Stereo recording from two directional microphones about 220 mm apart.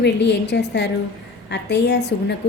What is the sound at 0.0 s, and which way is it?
A woman's voice, 50° left (ahead or behind).